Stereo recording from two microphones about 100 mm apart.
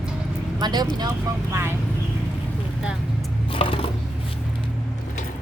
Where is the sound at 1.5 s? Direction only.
25° right (ahead or behind).